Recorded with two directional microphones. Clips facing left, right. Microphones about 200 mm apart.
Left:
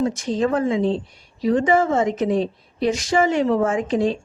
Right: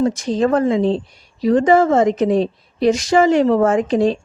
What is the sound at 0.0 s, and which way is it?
Speech, 40° right (ahead or behind).